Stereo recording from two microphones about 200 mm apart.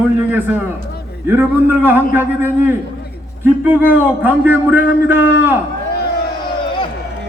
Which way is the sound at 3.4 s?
10° right (ahead or behind).